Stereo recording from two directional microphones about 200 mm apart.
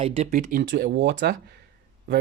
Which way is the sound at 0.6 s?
60° right (ahead or behind).